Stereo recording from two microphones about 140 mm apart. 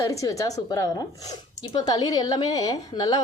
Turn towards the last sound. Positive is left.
turn(degrees=25)  # may be behind; listen again after turning